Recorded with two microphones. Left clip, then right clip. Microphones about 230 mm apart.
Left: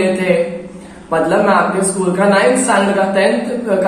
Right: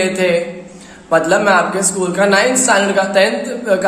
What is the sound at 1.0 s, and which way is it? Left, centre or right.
A woman's voice, right.